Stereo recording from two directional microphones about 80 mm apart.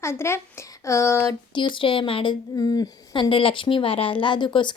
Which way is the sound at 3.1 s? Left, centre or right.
Left.